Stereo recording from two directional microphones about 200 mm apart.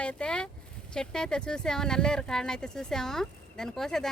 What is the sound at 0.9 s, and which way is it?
Speech, 5° left (ahead or behind).